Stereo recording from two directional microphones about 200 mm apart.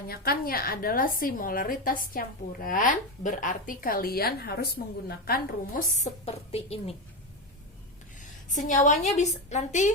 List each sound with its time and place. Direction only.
0.1 s a woman's voice: 50° left (ahead or behind); by 6.9 s 30° left (ahead or behind)
8.4 s a woman's voice: 40° left (ahead or behind)